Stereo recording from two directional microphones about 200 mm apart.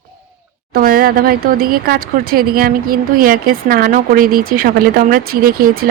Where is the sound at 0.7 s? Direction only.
50° right (ahead or behind).